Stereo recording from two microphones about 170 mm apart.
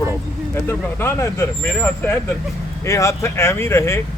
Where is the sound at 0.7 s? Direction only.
15° left (ahead or behind).